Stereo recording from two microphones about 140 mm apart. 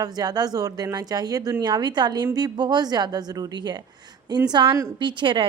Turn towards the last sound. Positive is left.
turn(degrees=-35)  # may be behind; listen again after turning